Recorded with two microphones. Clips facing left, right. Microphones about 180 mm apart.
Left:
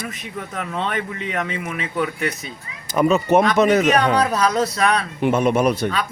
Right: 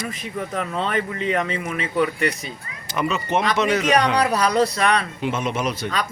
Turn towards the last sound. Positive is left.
turn(degrees=55)  # may be behind; listen again after turning